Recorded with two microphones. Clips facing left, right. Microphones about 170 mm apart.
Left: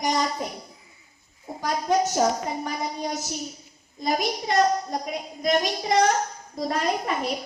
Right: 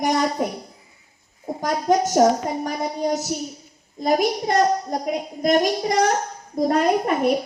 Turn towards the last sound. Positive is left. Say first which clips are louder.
# right 7 dB
turn(degrees=-55)  # may be behind; listen again after turning